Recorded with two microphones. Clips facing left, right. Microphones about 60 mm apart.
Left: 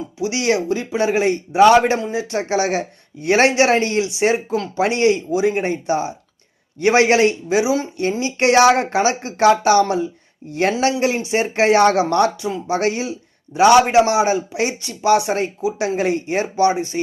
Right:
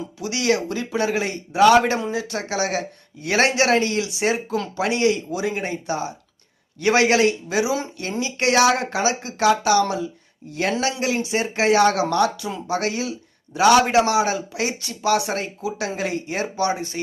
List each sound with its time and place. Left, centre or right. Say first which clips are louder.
0.2 s a man's voice: left 3 dB; left
5.3 s a man's voice: left 7 dB; left